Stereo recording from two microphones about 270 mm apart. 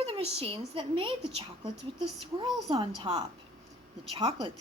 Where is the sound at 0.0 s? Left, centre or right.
Right.